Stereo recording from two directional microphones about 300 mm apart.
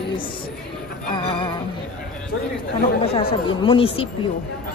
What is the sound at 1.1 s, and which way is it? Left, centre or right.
Music, centre.